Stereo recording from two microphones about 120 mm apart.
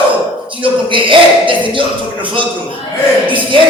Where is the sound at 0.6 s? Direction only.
45° right (ahead or behind).